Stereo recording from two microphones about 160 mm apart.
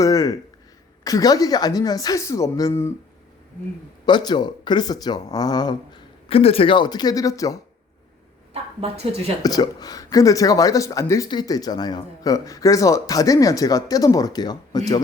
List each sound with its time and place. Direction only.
0.0 s a sound: 20° left (ahead or behind)
1.0 s speech: 20° left (ahead or behind)
4.0 s speech: 25° left (ahead or behind)
8.8 s speech: 40° right (ahead or behind)
9.4 s speech: 25° left (ahead or behind)